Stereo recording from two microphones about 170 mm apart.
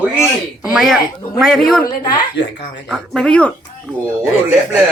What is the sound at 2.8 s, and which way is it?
Speech, centre (ahead or behind).